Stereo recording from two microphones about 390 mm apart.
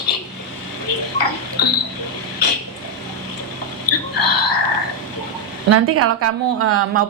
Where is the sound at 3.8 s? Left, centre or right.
Left.